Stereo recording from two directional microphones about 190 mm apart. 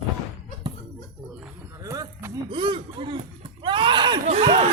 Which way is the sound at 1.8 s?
15° right (ahead or behind).